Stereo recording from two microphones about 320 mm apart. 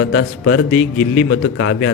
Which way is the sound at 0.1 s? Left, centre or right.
Left.